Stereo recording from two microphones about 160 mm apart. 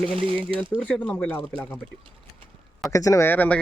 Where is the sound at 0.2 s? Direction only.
35° right (ahead or behind).